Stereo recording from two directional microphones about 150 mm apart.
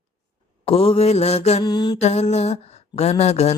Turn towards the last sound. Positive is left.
turn(degrees=45)  # may be behind; listen again after turning